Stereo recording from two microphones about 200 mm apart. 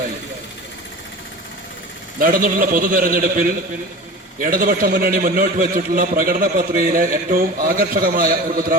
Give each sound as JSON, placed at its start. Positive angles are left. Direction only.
{"t": 2.1, "sound": "a man's voice", "side_deg": -45}